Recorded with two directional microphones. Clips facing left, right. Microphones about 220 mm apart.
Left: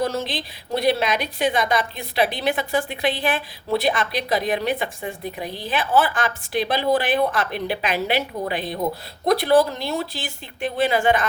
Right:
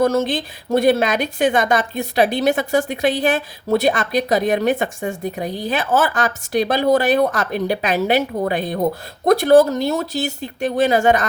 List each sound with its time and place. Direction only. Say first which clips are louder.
0.0 s a woman's voice: right 7 dB; 50° right (ahead or behind)